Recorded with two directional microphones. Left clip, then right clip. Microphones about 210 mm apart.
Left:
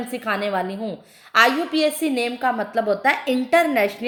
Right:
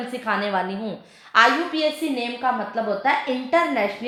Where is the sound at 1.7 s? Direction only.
45° left (ahead or behind).